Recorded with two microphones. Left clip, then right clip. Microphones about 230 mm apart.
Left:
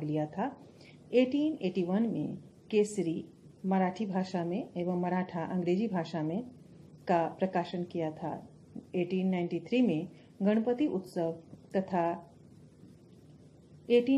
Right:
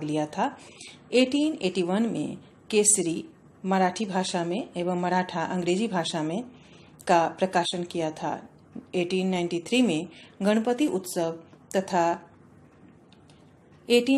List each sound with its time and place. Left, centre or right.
0.0 s a woman's voice: right
13.8 s speech: centre